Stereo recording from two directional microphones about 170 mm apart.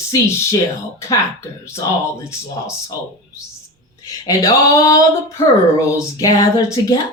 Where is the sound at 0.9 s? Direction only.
15° left (ahead or behind).